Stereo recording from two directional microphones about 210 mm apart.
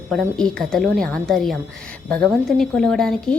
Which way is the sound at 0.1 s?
5° left (ahead or behind).